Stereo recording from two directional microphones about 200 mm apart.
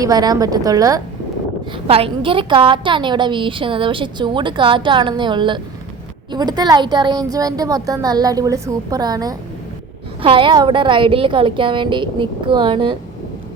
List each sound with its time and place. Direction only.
0.0 s a woman's voice: 20° right (ahead or behind)
1.9 s a woman's voice: 30° right (ahead or behind)